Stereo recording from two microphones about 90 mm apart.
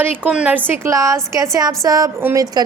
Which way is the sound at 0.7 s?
35° right (ahead or behind).